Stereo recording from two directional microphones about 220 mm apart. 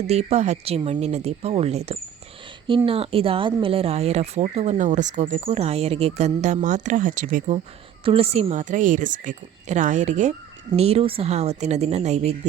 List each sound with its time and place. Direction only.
0.1 s a woman's voice: 30° right (ahead or behind)